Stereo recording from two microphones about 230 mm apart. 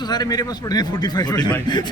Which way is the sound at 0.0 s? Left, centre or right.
Centre.